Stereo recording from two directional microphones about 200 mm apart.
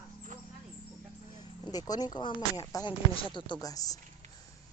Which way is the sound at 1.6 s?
20° left (ahead or behind).